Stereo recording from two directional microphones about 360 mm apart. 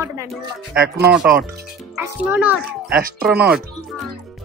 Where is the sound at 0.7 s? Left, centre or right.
Right.